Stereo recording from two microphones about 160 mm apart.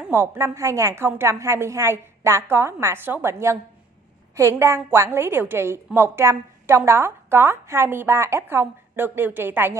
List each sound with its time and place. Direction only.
0.0 s a woman's voice: 15° right (ahead or behind)